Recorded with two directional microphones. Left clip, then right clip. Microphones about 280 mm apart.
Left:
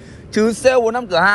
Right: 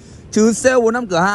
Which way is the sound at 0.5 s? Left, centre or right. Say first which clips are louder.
Left 1 dB; right.